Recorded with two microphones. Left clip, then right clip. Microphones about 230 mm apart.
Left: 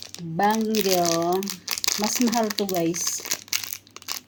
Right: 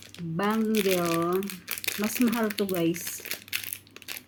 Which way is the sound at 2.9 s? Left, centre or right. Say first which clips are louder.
Left 8 dB; centre.